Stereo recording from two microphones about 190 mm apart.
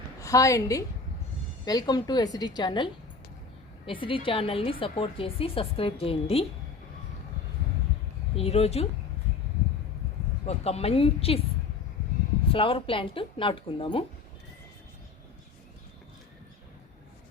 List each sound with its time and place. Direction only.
0.2 s a woman's voice: 15° left (ahead or behind)
8.4 s a woman's voice: 30° left (ahead or behind)
10.4 s a woman's voice: 35° left (ahead or behind)
12.5 s a woman's voice: 30° left (ahead or behind)